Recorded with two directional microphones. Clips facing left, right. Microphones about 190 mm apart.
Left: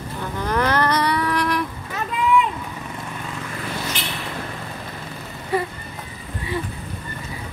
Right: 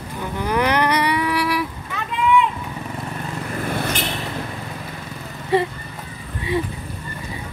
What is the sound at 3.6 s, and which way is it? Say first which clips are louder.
Vehicle: right 6 dB; 55° right (ahead or behind).